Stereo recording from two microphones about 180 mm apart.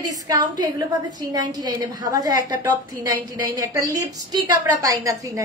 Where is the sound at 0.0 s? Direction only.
20° right (ahead or behind).